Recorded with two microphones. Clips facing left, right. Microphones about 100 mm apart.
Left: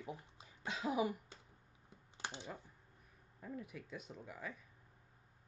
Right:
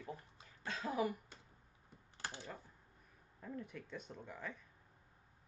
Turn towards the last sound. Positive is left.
turn(degrees=5)  # may be behind; listen again after turning